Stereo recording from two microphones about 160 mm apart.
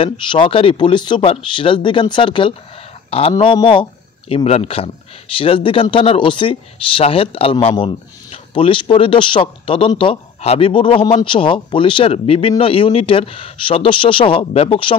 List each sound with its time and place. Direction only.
0.0 s speech: 35° left (ahead or behind)